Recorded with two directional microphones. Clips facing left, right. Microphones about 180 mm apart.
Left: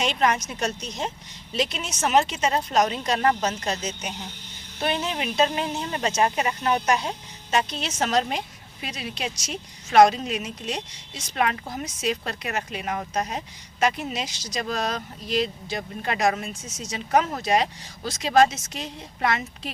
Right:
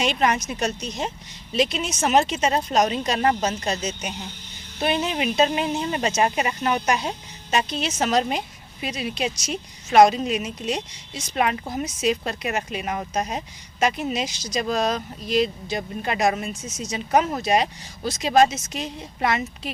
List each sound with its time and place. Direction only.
0.0 s speech: 10° right (ahead or behind)